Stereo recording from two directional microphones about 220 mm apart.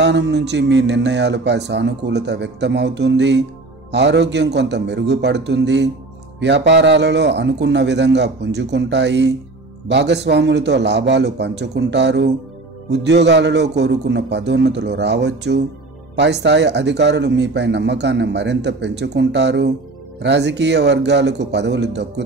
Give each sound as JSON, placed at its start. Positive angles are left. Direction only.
{"t": 0.0, "sound": "speech", "side_deg": -50}